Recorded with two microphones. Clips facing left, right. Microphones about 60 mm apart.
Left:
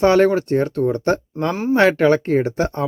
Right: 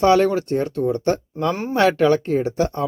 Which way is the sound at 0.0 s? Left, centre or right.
Left.